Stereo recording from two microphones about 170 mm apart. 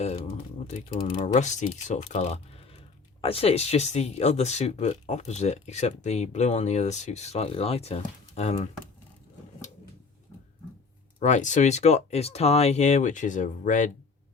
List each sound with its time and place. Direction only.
0.0 s speech: 40° left (ahead or behind)
1.2 s speech: 45° left (ahead or behind)
11.2 s speech: 45° left (ahead or behind)